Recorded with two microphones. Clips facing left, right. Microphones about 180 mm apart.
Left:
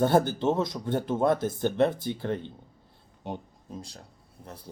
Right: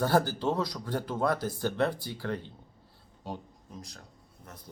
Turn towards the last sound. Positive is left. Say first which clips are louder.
# left 5 dB
turn(degrees=30)  # may be behind; listen again after turning